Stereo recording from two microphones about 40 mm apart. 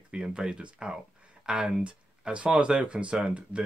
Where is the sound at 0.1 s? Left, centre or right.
Centre.